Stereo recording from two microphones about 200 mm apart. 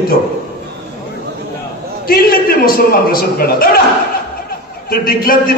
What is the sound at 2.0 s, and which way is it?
A man's voice, 45° left (ahead or behind).